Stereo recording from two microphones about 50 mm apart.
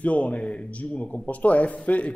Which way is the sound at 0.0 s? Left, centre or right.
Left.